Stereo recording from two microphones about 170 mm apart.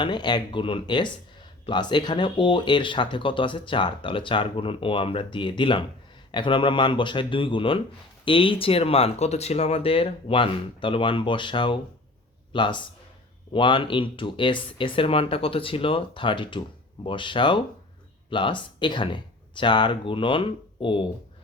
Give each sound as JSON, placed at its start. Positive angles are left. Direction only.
{"t": 0.0, "sound": "speech", "side_deg": 25}